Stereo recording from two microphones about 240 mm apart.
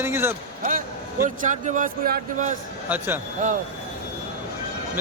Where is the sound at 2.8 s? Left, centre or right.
Centre.